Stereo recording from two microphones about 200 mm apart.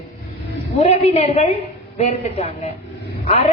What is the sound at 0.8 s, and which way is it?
Speech, 30° left (ahead or behind).